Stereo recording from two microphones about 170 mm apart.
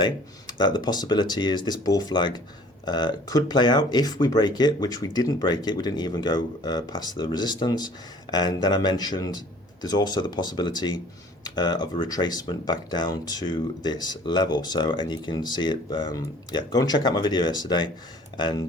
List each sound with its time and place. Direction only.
0.0 s speech: 25° left (ahead or behind)